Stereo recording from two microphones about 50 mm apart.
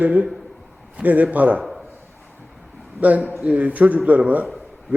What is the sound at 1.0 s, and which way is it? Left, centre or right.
Speech, right.